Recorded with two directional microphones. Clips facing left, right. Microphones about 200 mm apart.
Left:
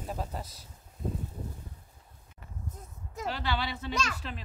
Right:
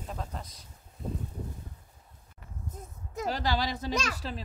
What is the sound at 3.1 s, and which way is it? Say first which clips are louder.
A woman's voice: right 3 dB; 40° right (ahead or behind).